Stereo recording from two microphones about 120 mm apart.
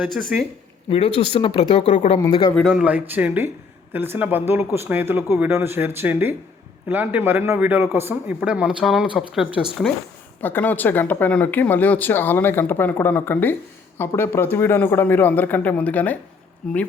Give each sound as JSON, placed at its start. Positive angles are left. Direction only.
{"t": 0.0, "sound": "speech", "side_deg": 0}
{"t": 0.9, "sound": "speech", "side_deg": 55}
{"t": 2.6, "sound": "speech", "side_deg": 0}
{"t": 2.8, "sound": "a man's voice", "side_deg": -10}
{"t": 10.4, "sound": "speech", "side_deg": 15}